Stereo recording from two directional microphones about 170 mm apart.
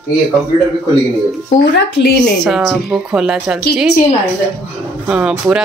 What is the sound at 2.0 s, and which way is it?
Speech, 80° left.